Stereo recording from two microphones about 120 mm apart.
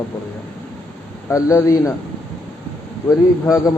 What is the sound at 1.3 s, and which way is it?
Speech, 25° left (ahead or behind).